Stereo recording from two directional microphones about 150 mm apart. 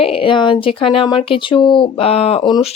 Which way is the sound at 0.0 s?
40° left (ahead or behind).